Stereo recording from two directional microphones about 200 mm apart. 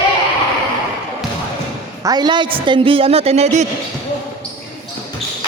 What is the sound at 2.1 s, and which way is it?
A woman's voice, 20° right (ahead or behind).